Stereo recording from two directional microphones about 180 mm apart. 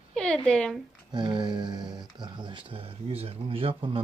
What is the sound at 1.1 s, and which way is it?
Speech, 25° right (ahead or behind).